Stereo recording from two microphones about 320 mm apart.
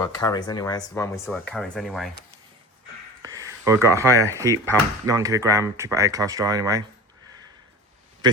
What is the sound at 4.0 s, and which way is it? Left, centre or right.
Speech, centre.